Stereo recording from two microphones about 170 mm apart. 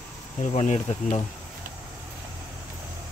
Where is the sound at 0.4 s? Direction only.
40° left (ahead or behind).